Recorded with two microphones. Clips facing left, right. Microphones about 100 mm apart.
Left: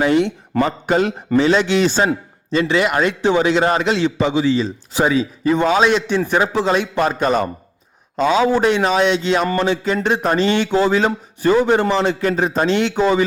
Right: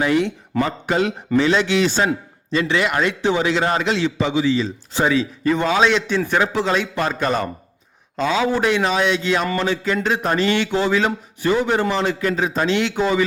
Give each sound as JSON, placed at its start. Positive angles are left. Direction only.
{"t": 0.0, "sound": "a man's voice", "side_deg": 25}
{"t": 0.9, "sound": "a man's voice", "side_deg": 40}
{"t": 3.2, "sound": "a man's voice", "side_deg": 35}
{"t": 3.4, "sound": "a man's voice", "side_deg": 25}
{"t": 3.8, "sound": "a man's voice", "side_deg": 40}
{"t": 4.9, "sound": "a man's voice", "side_deg": 15}